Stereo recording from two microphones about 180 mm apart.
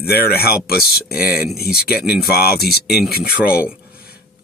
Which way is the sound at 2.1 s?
60° left (ahead or behind).